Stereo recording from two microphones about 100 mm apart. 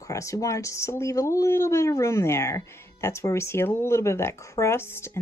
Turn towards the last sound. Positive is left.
turn(degrees=25)  # may be behind; listen again after turning